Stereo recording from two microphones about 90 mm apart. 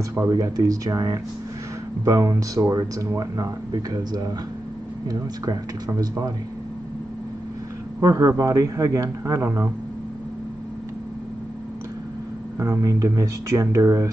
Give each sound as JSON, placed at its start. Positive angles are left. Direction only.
{"t": 0.3, "sound": "speech", "side_deg": -45}
{"t": 8.0, "sound": "speech", "side_deg": -40}
{"t": 12.5, "sound": "speech", "side_deg": -30}